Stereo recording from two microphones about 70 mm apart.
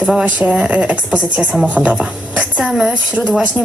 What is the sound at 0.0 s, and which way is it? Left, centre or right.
Speech, centre.